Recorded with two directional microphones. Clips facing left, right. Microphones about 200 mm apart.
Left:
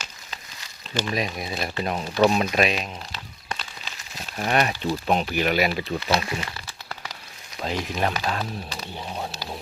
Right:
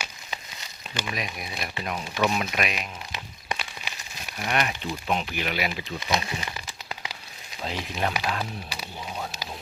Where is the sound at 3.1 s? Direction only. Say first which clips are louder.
Right 2 dB; 10° right (ahead or behind).